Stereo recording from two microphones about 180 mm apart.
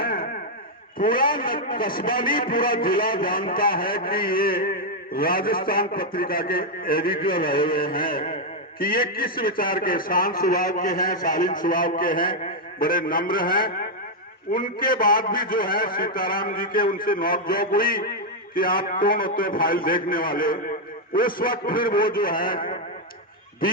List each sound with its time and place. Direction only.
0.0 s chop: 55° left (ahead or behind)
0.9 s a man's voice: 55° left (ahead or behind)